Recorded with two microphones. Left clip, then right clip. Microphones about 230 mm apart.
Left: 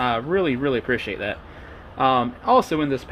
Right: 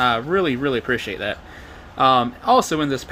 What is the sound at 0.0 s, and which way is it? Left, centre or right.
Speech, centre.